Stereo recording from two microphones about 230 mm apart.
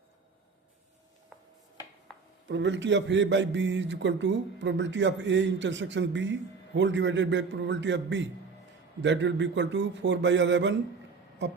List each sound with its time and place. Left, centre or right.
2.5 s a man's voice: right